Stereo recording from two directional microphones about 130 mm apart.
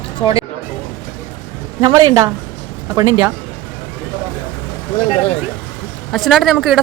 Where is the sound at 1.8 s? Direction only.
35° right (ahead or behind).